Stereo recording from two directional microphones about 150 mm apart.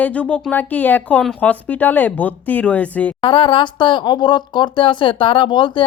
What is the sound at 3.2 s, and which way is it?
Speech, 35° left (ahead or behind).